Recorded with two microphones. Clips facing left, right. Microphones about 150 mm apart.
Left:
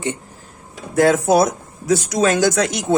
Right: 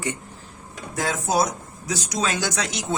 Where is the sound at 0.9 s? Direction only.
65° left (ahead or behind).